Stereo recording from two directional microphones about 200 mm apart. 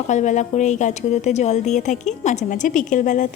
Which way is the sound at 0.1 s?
35° left (ahead or behind).